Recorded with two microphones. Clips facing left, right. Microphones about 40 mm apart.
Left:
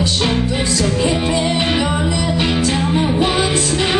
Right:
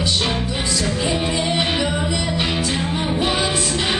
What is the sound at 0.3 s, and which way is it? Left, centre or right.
Music, centre.